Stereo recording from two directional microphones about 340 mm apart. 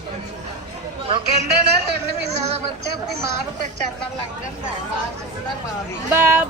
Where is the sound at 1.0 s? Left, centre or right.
Centre.